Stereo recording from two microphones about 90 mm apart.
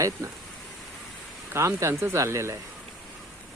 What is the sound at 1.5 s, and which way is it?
Speech, 30° right (ahead or behind).